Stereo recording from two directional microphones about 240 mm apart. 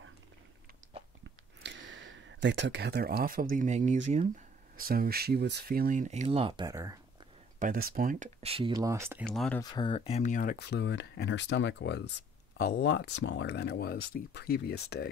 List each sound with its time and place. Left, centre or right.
1.6 s speech: right; by 7.0 s centre
7.5 s speech: right; by 9.2 s centre
9.2 s speech: centre
9.6 s speech: centre; by 15.0 s left